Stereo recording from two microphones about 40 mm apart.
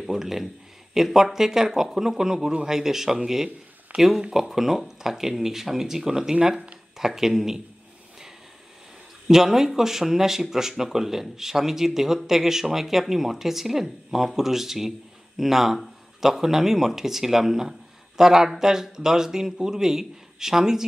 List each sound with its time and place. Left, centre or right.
0.0 s speech: centre
3.9 s speech: right
4.3 s speech: centre
9.3 s speech: centre